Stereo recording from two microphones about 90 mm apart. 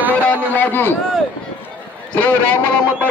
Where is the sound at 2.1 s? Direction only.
15° left (ahead or behind).